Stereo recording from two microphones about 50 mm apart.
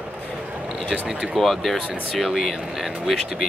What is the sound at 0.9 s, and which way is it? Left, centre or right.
Speech, centre.